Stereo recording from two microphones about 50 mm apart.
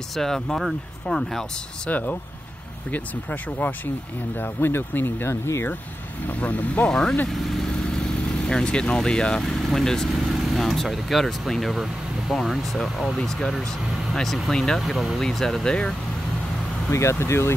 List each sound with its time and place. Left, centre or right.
0.1 s speech: centre
1.9 s speech: left
4.4 s speech: left
6.2 s speech: left
6.9 s speech: centre
7.2 s speech: centre
7.8 s vehicle: centre
9.4 s speech: centre
15.6 s speech: centre
16.9 s speech: left